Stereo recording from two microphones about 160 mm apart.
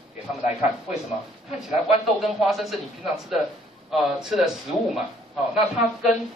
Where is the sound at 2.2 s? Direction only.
Centre (ahead or behind).